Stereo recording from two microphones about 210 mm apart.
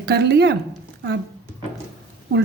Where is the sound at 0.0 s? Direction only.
50° right (ahead or behind).